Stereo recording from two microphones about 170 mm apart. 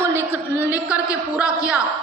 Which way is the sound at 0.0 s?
10° right (ahead or behind).